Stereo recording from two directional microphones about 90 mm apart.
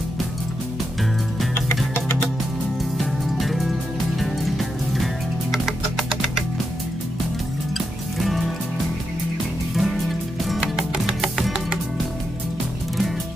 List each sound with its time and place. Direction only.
2.0 s music: 25° left (ahead or behind)
3.3 s music: centre (ahead or behind)
7.7 s music: centre (ahead or behind)
9.8 s music: centre (ahead or behind)